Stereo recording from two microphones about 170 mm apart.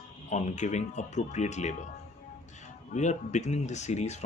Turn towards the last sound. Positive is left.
turn(degrees=40)  # may be behind; listen again after turning